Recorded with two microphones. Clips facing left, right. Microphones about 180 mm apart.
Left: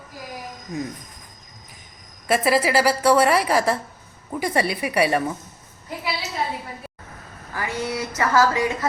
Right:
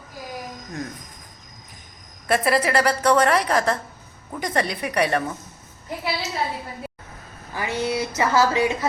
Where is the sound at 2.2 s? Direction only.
Centre (ahead or behind).